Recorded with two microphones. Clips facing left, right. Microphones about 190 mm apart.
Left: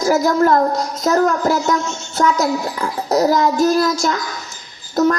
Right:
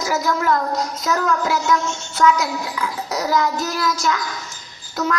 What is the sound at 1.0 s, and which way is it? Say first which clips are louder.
A child's voice: left 7 dB; 45° left (ahead or behind).